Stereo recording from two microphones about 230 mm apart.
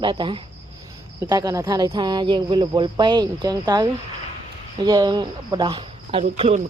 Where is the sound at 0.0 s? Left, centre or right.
Right.